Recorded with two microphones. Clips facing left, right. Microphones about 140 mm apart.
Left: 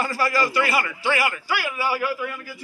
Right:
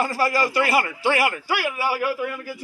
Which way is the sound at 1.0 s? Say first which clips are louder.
Right 2 dB; 50° right (ahead or behind).